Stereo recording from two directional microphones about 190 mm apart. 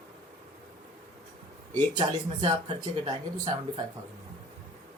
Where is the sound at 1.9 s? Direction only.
25° right (ahead or behind).